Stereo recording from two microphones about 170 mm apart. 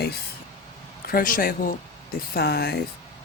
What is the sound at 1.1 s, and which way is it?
Speech, 55° left (ahead or behind).